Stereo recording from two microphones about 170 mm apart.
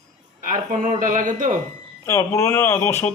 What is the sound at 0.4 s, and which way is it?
Speech, 50° right (ahead or behind).